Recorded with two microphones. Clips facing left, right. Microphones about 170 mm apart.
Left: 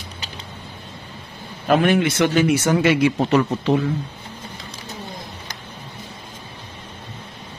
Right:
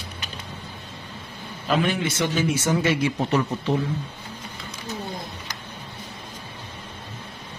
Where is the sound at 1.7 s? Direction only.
60° left (ahead or behind); by 3.8 s 90° left.